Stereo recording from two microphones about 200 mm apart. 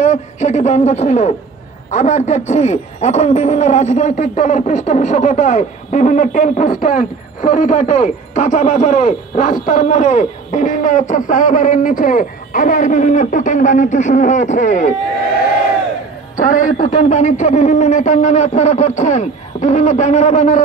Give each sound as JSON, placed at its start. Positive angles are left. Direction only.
{"t": 0.0, "sound": "speech", "side_deg": 35}
{"t": 16.3, "sound": "speech", "side_deg": 40}